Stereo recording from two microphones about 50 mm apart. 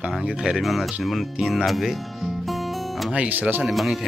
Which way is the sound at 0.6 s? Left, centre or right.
Centre.